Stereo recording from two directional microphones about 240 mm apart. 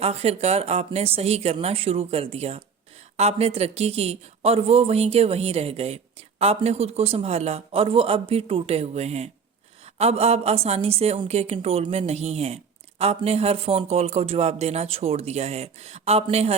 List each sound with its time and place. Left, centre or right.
0.0 s a man's voice: right